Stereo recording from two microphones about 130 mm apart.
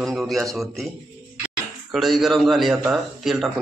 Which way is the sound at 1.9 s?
Centre (ahead or behind).